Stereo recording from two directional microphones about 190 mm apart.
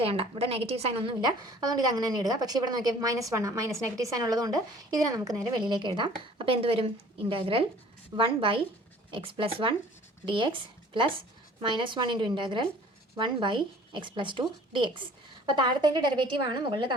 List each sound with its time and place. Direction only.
0.0 s a woman's voice: 30° right (ahead or behind)